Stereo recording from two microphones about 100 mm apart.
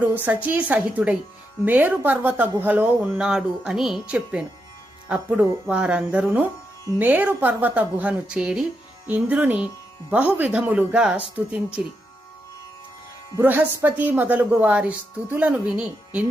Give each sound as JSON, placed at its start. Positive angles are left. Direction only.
{"t": 0.0, "sound": "a woman's voice", "side_deg": -15}
{"t": 13.4, "sound": "a woman's voice", "side_deg": -20}